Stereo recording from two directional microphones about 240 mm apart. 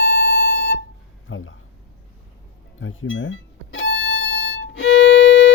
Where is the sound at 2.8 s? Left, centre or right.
Left.